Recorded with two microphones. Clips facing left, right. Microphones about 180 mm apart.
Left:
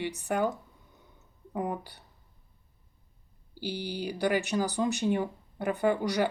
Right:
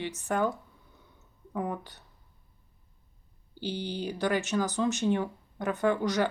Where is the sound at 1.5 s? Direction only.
15° left (ahead or behind).